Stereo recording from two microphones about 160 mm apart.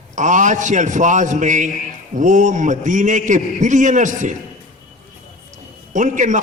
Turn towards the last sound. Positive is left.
turn(degrees=-50)  # may be behind; listen again after turning